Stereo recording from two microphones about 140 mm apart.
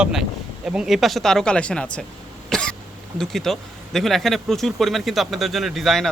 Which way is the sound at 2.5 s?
5° left (ahead or behind).